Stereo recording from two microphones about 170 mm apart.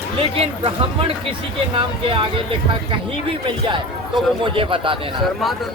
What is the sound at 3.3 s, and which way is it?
Speech, 30° right (ahead or behind).